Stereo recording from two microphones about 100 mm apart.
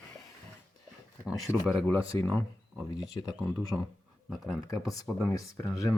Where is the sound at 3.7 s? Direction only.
5° right (ahead or behind).